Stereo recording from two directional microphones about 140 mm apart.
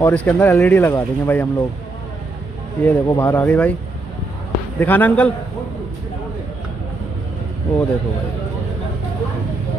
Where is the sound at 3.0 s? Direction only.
20° left (ahead or behind).